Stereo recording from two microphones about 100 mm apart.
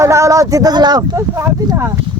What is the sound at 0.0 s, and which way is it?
Speech, 30° right (ahead or behind).